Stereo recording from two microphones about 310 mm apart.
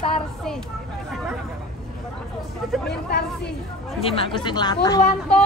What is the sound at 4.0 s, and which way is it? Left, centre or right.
Speech, centre.